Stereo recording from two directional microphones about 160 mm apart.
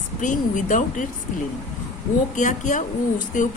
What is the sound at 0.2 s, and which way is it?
Speech, 55° left (ahead or behind).